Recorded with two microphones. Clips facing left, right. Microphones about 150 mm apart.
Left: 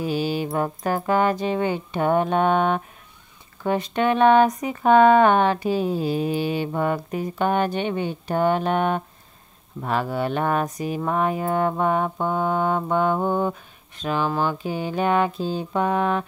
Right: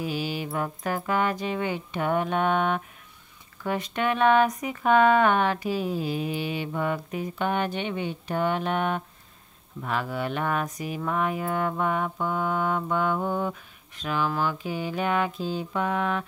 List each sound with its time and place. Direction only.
0.0 s speech: 35° left (ahead or behind)